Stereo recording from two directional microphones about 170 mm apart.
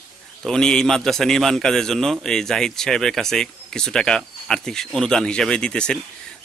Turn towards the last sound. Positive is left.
turn(degrees=5)  # may be behind; listen again after turning